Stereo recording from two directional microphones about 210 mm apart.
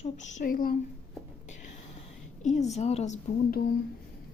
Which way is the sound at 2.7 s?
30° left (ahead or behind).